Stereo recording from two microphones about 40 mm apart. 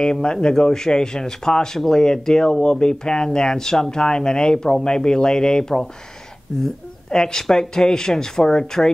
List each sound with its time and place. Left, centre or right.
0.0 s speech: left